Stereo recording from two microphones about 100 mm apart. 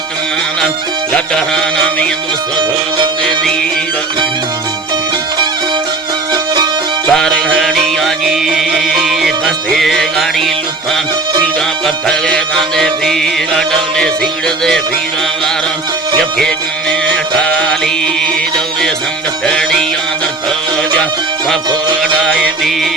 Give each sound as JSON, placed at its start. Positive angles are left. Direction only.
{"t": 1.1, "sound": "music", "side_deg": 10}
{"t": 6.3, "sound": "music", "side_deg": -45}
{"t": 7.1, "sound": "music", "side_deg": 10}
{"t": 12.0, "sound": "music", "side_deg": 5}
{"t": 17.3, "sound": "music", "side_deg": 10}
{"t": 22.4, "sound": "music", "side_deg": 0}